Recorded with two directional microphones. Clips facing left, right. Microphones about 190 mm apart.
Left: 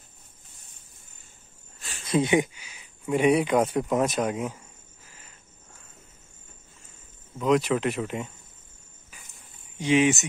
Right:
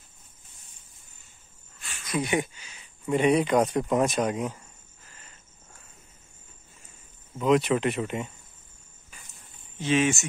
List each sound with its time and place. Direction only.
1.8 s speech: 30° left (ahead or behind); by 4.6 s 5° left (ahead or behind)
7.3 s speech: centre (ahead or behind)
9.8 s speech: 15° left (ahead or behind)